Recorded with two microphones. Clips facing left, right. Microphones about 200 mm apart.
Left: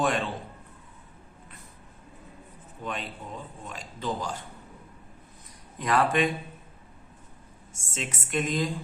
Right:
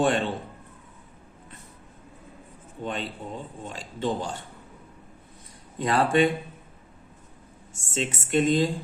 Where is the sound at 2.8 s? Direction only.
30° right (ahead or behind).